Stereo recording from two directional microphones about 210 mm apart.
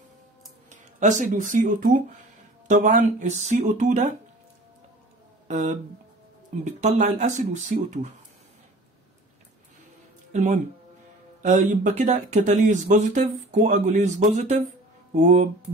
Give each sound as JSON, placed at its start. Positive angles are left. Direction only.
{"t": 0.7, "sound": "speech", "side_deg": -35}
{"t": 5.5, "sound": "speech", "side_deg": -35}
{"t": 10.3, "sound": "speech", "side_deg": -35}